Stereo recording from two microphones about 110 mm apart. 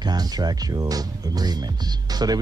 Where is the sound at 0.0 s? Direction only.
40° right (ahead or behind).